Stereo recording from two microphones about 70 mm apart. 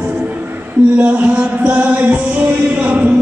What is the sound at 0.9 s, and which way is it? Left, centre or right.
Music, right.